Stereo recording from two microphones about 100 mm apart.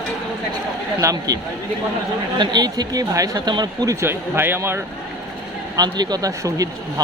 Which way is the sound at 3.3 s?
45° right (ahead or behind).